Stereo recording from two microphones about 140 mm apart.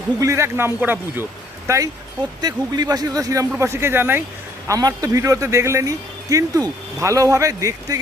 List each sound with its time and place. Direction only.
0.2 s speech: 20° right (ahead or behind)
4.7 s speech: 25° right (ahead or behind)